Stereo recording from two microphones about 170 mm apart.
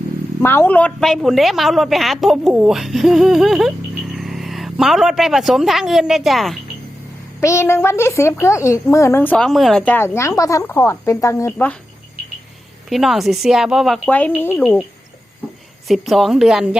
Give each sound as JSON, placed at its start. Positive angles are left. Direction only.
{"t": 0.4, "sound": "a woman's voice", "side_deg": 10}
{"t": 7.4, "sound": "speech", "side_deg": 15}
{"t": 12.9, "sound": "a woman's voice", "side_deg": 0}
{"t": 15.9, "sound": "a woman's voice", "side_deg": 0}